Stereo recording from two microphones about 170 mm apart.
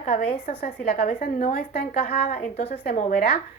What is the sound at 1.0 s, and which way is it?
Speech, 50° left (ahead or behind).